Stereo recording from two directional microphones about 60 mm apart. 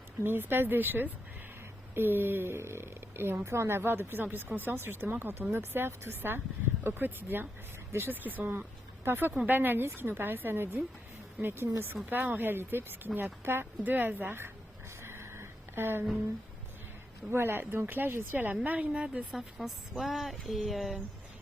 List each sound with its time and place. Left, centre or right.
0.2 s speech: right
15.0 s a sound: right
17.3 s a woman's voice: right
18.9 s a woman's voice: centre